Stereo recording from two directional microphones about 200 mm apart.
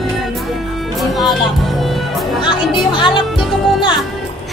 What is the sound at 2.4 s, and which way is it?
Music, 25° left (ahead or behind).